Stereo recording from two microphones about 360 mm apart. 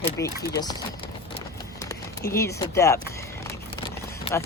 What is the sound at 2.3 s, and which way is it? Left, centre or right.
A woman's voice, centre.